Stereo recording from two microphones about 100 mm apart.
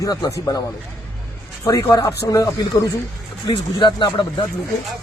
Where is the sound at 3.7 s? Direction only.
50° left (ahead or behind).